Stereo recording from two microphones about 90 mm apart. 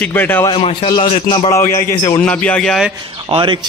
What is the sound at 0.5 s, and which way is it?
Speech, 90° left.